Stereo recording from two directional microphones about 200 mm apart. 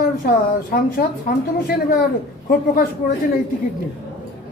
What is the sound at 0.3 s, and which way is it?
A woman's voice, 50° left (ahead or behind).